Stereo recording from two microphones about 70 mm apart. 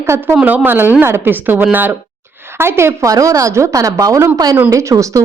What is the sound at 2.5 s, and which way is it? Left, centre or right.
Speech, right.